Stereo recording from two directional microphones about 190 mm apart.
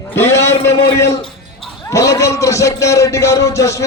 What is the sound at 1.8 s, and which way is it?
A man's voice, 15° left (ahead or behind).